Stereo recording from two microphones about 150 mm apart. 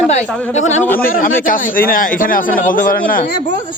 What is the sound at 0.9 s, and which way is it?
A man's voice, 70° left (ahead or behind).